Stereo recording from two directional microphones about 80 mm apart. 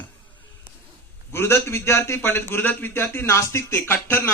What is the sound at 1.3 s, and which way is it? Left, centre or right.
A man's voice, left.